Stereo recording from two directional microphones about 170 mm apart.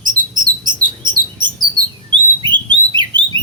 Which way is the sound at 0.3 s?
25° right (ahead or behind).